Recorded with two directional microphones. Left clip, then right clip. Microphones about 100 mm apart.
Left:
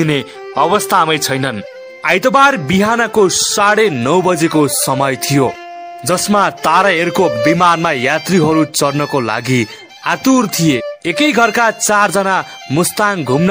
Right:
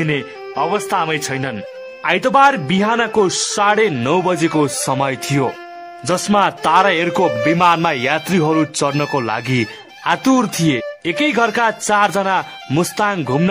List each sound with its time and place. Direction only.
0.1 s speech: 55° left (ahead or behind)
0.7 s speech: 45° left (ahead or behind)
2.0 s speech: 25° left (ahead or behind)
3.6 s speech: 35° left (ahead or behind)
4.6 s speech: 20° left (ahead or behind)
10.7 s speech: 30° left (ahead or behind)